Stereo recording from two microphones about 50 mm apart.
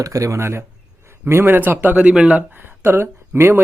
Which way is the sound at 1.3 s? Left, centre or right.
Right.